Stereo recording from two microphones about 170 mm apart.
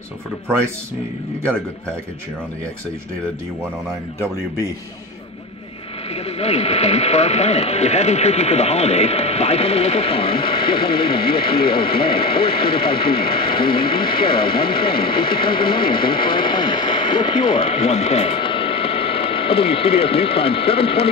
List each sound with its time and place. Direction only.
6.1 s speech: 35° left (ahead or behind)